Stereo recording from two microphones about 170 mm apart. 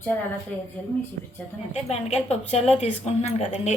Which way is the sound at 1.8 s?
40° left (ahead or behind).